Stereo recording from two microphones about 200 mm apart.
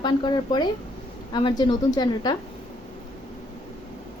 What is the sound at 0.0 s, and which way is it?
A woman's voice, 20° left (ahead or behind).